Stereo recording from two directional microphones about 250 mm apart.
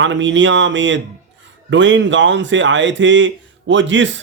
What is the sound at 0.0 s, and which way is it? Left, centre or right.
Speech, right.